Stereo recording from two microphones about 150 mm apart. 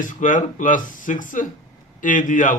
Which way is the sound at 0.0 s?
60° left (ahead or behind).